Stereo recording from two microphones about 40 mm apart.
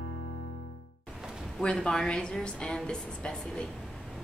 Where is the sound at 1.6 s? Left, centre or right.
Centre.